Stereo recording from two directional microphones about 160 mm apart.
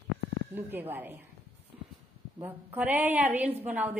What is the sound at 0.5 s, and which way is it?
Speech, 15° right (ahead or behind).